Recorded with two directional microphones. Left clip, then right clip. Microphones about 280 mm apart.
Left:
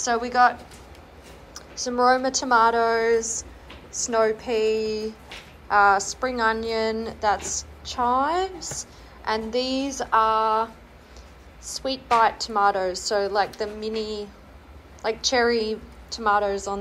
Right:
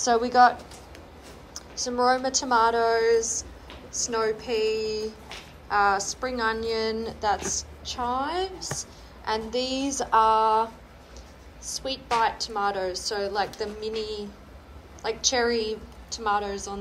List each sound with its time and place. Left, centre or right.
0.0 s a woman's voice: centre